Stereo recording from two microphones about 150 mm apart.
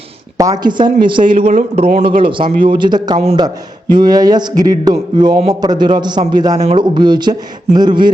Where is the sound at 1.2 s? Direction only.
50° right (ahead or behind).